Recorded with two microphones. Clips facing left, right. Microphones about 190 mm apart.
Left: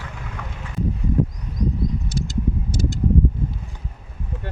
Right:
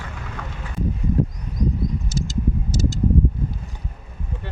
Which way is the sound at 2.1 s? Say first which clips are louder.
Even; 60° left (ahead or behind).